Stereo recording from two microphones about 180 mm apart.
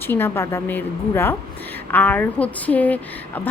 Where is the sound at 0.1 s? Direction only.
15° left (ahead or behind).